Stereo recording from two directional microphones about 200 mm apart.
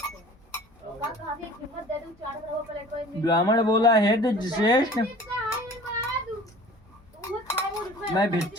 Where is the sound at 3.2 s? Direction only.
20° left (ahead or behind).